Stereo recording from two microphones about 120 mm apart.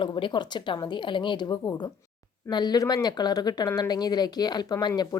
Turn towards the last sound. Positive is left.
turn(degrees=35)  # may be behind; listen again after turning